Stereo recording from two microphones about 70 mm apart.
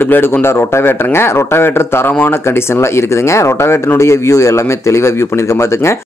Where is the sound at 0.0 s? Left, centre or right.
Left.